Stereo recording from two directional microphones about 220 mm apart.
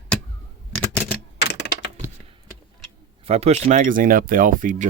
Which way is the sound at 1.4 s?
50° left (ahead or behind).